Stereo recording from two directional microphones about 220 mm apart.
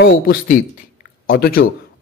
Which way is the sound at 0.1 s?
40° left (ahead or behind).